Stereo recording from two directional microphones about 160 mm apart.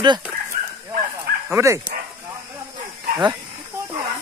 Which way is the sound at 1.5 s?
20° right (ahead or behind).